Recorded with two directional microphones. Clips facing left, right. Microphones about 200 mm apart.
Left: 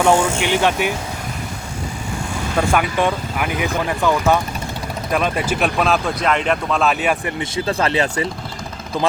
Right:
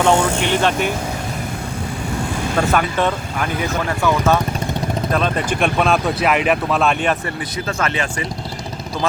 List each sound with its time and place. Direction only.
0.0 s speech: 10° left (ahead or behind)
2.6 s speech: 10° left (ahead or behind)
7.3 s speech: 30° left (ahead or behind)